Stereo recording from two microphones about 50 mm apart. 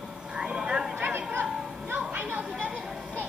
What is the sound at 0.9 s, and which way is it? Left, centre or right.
Chatter, right.